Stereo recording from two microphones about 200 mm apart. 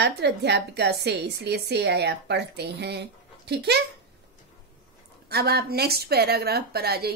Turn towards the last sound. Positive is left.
turn(degrees=-50)  # may be behind; listen again after turning